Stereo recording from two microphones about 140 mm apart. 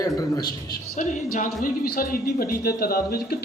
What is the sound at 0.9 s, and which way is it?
Speech, 70° left (ahead or behind).